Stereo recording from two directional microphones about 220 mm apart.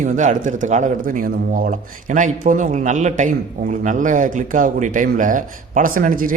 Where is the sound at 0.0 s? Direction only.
35° right (ahead or behind).